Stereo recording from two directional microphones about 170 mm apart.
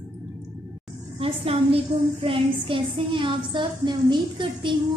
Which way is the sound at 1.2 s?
35° right (ahead or behind).